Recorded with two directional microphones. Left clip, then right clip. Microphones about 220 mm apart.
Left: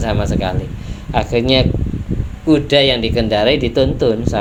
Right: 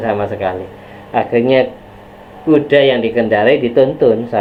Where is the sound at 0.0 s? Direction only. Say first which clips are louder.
Right 3 dB; 40° left (ahead or behind).